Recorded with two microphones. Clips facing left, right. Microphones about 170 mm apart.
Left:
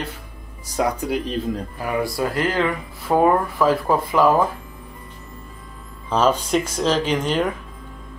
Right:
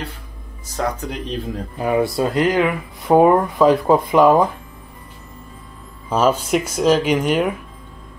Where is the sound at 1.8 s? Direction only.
25° right (ahead or behind).